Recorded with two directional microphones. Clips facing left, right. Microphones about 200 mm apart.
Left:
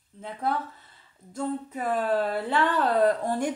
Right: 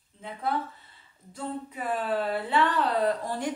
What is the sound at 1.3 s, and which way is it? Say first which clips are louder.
A woman's voice: left 5 dB; 45° left (ahead or behind).